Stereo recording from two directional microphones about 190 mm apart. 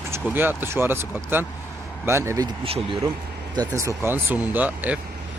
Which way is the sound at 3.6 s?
15° right (ahead or behind).